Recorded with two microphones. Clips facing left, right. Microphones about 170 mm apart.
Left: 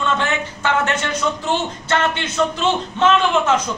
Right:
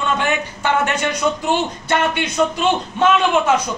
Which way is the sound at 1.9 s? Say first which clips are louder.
Even; 10° right (ahead or behind).